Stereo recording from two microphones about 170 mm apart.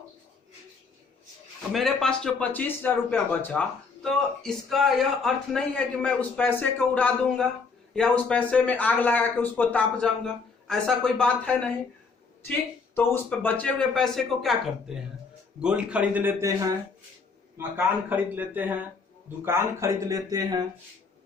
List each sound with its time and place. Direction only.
1.7 s a man's voice: centre (ahead or behind)
13.0 s a man's voice: 10° left (ahead or behind); by 20.6 s 20° right (ahead or behind)